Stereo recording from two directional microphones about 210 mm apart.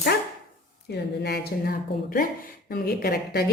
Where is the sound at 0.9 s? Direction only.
50° left (ahead or behind).